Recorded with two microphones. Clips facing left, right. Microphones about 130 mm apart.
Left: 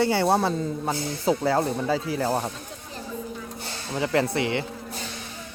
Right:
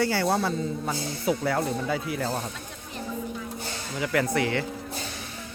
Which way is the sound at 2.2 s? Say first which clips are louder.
Left 5 dB; 55° left (ahead or behind).